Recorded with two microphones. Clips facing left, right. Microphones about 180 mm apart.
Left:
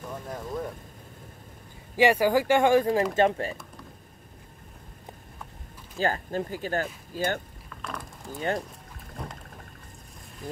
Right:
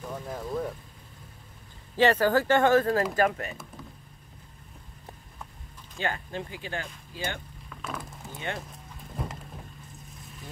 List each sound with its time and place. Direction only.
0.1 s speech: centre (ahead or behind)
2.0 s speech: 10° left (ahead or behind)
3.2 s speech: 30° left (ahead or behind)
5.9 s speech: 40° left (ahead or behind)
7.7 s boat: 5° right (ahead or behind)
9.1 s rowboat: 5° right (ahead or behind)